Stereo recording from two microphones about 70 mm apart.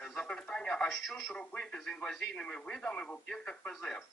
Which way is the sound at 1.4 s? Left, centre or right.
Centre.